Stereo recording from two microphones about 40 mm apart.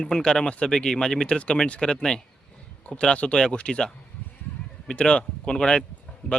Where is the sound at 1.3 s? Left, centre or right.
Left.